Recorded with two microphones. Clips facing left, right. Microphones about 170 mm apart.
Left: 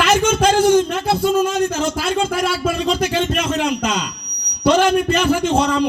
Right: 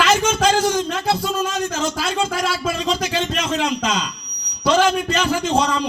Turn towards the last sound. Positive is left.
turn(degrees=55)  # may be behind; listen again after turning